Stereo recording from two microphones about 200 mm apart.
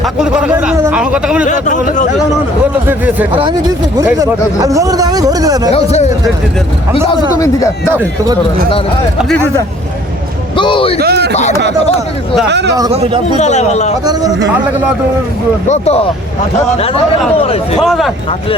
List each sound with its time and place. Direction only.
0.0 s speech: 5° right (ahead or behind)
1.5 s speech: 35° left (ahead or behind)
4.2 s speech: 15° right (ahead or behind)
5.7 s speech: 35° left (ahead or behind)
7.3 s speech: 15° left (ahead or behind)
10.6 s a sound: 25° left (ahead or behind)
11.0 s a sound: 55° right (ahead or behind)
11.8 s speech: 30° left (ahead or behind)
12.5 s speech: 60° right (ahead or behind)
13.3 s speech: 35° left (ahead or behind)
14.0 s speech: 20° right (ahead or behind)
15.7 s speech: 30° left (ahead or behind)
17.8 s speech: centre (ahead or behind)